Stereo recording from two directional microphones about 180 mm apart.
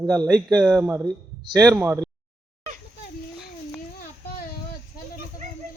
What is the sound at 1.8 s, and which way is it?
Speech, 10° right (ahead or behind).